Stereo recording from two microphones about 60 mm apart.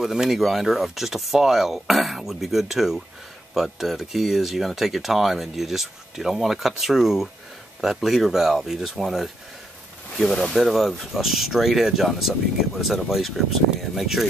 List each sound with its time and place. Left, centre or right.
0.0 s speech: centre